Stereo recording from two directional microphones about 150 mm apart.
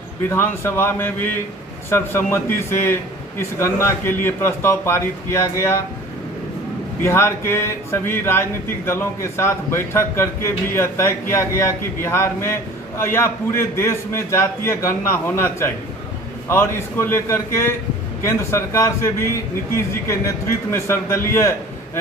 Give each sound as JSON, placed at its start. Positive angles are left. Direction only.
{"t": 0.3, "sound": "speech", "side_deg": 15}
{"t": 7.0, "sound": "speech", "side_deg": 15}